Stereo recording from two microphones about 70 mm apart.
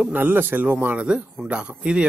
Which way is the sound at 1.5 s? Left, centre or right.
Centre.